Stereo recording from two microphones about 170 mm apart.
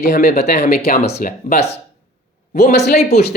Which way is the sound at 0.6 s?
65° left (ahead or behind).